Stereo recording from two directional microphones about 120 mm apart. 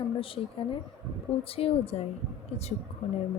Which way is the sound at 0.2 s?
50° left (ahead or behind).